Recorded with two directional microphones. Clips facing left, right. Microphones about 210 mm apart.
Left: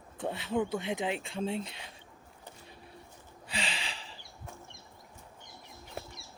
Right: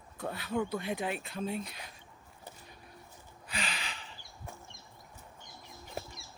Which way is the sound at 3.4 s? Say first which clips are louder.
Left 2 dB; 30° left (ahead or behind).